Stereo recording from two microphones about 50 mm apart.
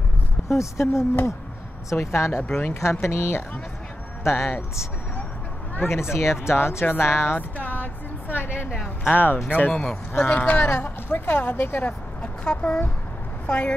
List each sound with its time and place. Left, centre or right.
0.5 s a woman's voice: left
5.8 s speech: left
7.3 s speech: left
9.7 s speech: centre
11.1 s speech: left
12.2 s speech: left